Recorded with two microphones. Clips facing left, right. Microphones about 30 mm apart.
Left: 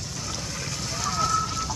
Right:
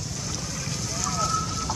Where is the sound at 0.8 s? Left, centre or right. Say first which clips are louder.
Left 2 dB; left.